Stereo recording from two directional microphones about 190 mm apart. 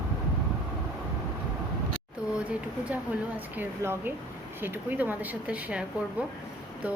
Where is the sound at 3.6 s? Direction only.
10° right (ahead or behind).